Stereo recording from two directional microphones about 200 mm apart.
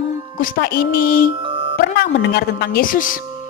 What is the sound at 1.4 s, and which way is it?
Music, 25° right (ahead or behind).